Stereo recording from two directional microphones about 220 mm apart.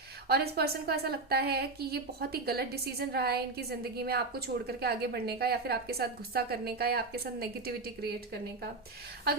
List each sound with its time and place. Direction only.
0.3 s a woman's voice: 45° right (ahead or behind)